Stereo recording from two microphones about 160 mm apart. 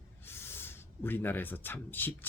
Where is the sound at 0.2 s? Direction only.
15° left (ahead or behind).